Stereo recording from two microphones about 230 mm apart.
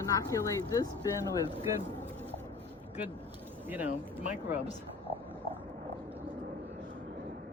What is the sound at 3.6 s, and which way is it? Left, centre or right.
Speech, centre.